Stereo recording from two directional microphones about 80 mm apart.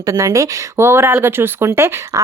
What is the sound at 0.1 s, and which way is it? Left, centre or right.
Speech, right.